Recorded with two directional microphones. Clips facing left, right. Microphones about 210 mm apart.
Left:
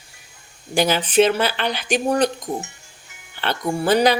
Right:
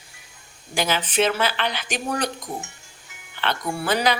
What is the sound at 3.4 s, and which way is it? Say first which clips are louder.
Speech: left 4 dB; 35° left (ahead or behind).